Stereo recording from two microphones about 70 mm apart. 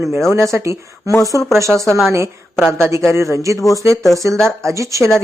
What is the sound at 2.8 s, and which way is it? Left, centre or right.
Speech, right.